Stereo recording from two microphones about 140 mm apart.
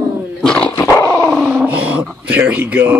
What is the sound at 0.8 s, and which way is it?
Dog, 25° left (ahead or behind).